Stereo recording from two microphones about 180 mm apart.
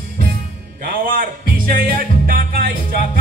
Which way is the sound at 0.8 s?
50° right (ahead or behind).